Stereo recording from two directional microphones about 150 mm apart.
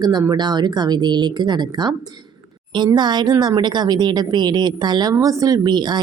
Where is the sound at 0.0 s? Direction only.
25° right (ahead or behind).